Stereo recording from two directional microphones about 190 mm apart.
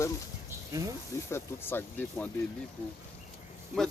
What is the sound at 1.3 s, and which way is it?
Speech, 10° left (ahead or behind).